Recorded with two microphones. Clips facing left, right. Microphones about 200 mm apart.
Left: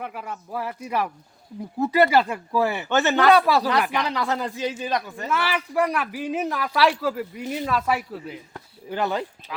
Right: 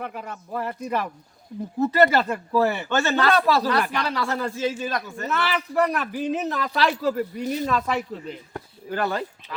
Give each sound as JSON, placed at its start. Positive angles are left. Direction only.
{"t": 0.0, "sound": "speech", "side_deg": 5}
{"t": 8.9, "sound": "speech", "side_deg": 20}